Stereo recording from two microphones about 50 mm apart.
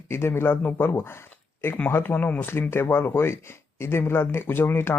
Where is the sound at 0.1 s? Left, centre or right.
Left.